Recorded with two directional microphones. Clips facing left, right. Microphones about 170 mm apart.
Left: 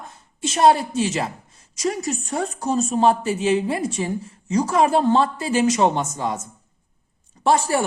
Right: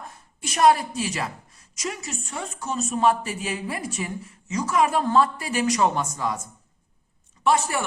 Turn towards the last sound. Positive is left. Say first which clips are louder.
# left 4 dB
turn(degrees=35)  # may be behind; listen again after turning